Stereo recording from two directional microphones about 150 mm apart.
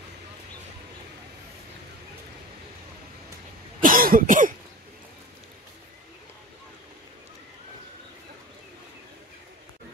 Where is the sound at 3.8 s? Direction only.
70° right (ahead or behind).